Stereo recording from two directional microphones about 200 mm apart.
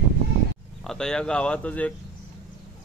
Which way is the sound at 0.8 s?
5° left (ahead or behind).